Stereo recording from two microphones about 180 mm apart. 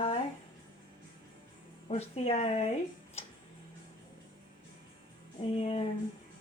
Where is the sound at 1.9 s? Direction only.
35° left (ahead or behind).